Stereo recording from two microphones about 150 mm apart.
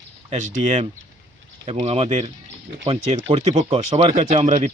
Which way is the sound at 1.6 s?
40° right (ahead or behind).